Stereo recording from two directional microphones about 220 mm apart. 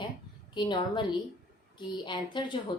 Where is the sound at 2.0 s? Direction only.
20° left (ahead or behind).